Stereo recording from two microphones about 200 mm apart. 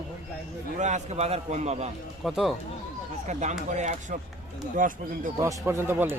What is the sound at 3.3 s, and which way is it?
A man's voice, 35° right (ahead or behind).